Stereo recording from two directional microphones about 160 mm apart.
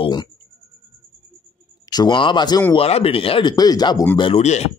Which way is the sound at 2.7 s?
40° left (ahead or behind).